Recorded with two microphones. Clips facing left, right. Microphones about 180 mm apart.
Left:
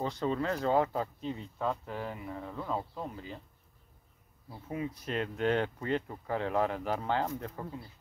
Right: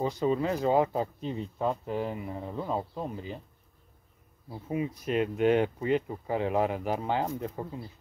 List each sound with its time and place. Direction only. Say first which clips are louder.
0.0 s speech: right 4 dB; 10° right (ahead or behind)
4.6 s speech: right 5 dB; 15° right (ahead or behind)